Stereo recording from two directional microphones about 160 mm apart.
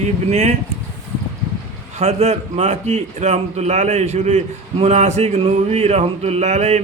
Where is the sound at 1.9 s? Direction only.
45° right (ahead or behind).